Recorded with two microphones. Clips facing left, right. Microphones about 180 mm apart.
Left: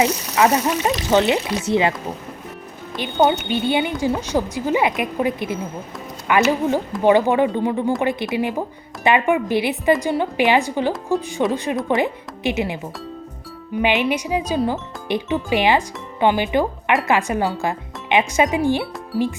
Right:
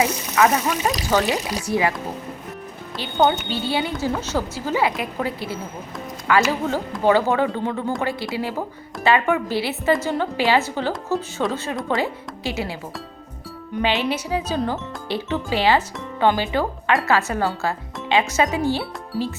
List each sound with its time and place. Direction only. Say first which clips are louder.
0.0 s speech: left 2 dB; 25° left (ahead or behind)
3.2 s speech: left 2 dB; 15° left (ahead or behind)
13.8 s speech: left 3 dB; 15° left (ahead or behind)